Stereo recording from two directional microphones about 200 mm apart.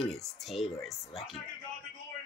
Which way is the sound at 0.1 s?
Centre (ahead or behind).